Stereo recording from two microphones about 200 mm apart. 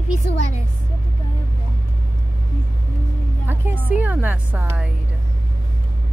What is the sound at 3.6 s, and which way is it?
Music, 10° right (ahead or behind).